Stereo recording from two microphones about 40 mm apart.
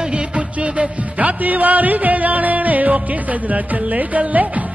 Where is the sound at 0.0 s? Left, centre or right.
Right.